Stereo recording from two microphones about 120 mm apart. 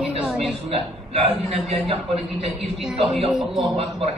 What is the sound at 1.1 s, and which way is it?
Speech, 60° right (ahead or behind).